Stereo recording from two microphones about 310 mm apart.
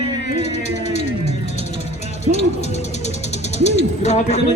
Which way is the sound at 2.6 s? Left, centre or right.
Left.